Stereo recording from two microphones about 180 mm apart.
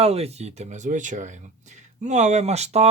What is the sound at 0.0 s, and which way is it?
Speech, 35° right (ahead or behind).